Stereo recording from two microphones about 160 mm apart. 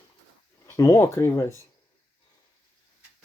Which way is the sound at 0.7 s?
20° left (ahead or behind).